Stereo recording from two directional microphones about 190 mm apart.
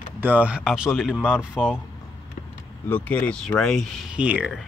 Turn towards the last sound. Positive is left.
turn(degrees=-5)  # may be behind; listen again after turning